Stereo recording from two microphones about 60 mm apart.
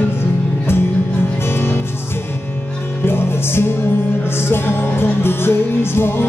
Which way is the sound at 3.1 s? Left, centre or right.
Left.